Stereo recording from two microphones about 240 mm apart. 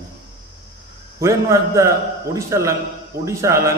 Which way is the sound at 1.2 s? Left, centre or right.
Centre.